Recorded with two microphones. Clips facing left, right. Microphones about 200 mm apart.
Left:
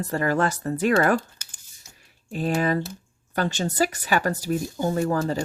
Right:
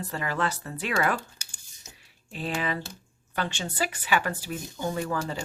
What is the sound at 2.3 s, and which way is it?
Speech, 45° left (ahead or behind).